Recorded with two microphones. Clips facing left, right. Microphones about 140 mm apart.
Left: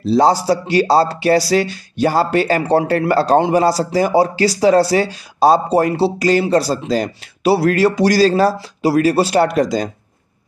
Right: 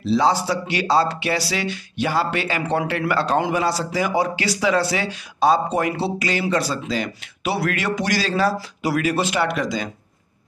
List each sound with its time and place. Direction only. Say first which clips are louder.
0.0 s speech: left 5 dB; 40° left (ahead or behind)